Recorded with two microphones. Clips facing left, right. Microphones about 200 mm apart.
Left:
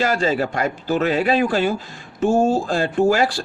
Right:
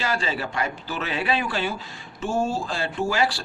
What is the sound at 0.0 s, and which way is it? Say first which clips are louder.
Speech: left 8 dB; 45° left (ahead or behind).